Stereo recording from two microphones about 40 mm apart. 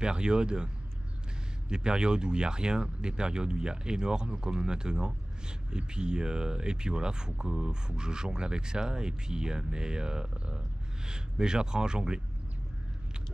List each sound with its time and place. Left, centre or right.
0.0 s speech: right
1.7 s speech: right